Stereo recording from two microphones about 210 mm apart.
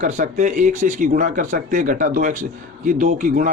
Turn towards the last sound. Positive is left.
turn(degrees=-40)  # may be behind; listen again after turning